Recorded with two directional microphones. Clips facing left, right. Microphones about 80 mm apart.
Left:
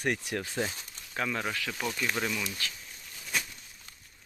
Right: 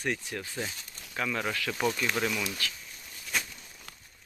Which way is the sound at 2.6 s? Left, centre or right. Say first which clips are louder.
Right 2 dB; left.